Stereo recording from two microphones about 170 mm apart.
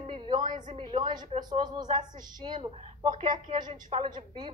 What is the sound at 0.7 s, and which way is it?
A woman's voice, 35° right (ahead or behind).